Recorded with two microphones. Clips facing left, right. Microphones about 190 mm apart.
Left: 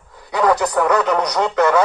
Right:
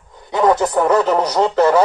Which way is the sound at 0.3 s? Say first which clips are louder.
Right 2 dB; 25° right (ahead or behind).